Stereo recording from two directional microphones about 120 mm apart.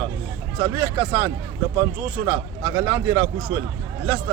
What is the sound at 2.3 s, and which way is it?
Speech, 25° right (ahead or behind).